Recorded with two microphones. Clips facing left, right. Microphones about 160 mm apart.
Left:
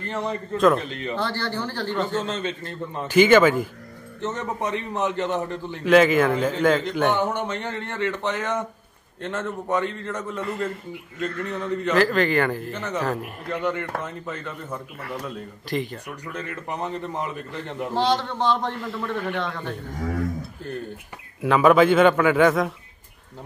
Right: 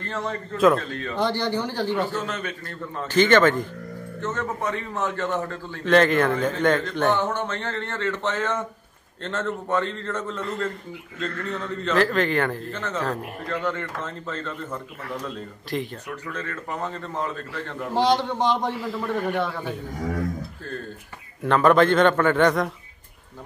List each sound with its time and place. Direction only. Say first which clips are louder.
0.0 s a man's voice: left 2 dB; 15° left (ahead or behind)
1.1 s a man's voice: right 4 dB; 15° right (ahead or behind)
2.1 s a man's voice: left 3 dB; 25° left (ahead or behind); by 3.6 s 10° left (ahead or behind)
4.2 s a man's voice: left 1 dB; 20° left (ahead or behind)
5.9 s a man's voice: left 2 dB; 5° left (ahead or behind)
6.8 s a man's voice: left 1 dB; 15° left (ahead or behind)
11.9 s a man's voice: left 1 dB; centre (ahead or behind)
12.7 s a man's voice: left 1 dB; 15° left (ahead or behind)
13.0 s a man's voice: left 2 dB; centre (ahead or behind)
13.5 s a man's voice: left 2 dB; 15° left (ahead or behind)
15.0 s a man's voice: even; centre (ahead or behind)
16.3 s a man's voice: left 1 dB; 15° left (ahead or behind)
17.9 s a man's voice: right 2 dB; 15° right (ahead or behind)
21.4 s a man's voice: left 1 dB; 5° left (ahead or behind)